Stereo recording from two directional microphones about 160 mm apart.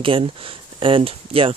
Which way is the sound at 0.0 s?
35° right (ahead or behind).